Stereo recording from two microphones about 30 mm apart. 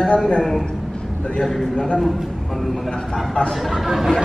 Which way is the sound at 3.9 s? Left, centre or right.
Centre.